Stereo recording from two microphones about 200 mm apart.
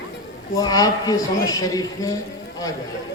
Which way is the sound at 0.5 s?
20° left (ahead or behind).